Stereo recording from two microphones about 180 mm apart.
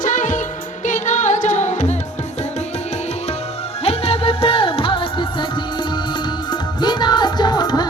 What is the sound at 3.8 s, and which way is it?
Music, 30° left (ahead or behind).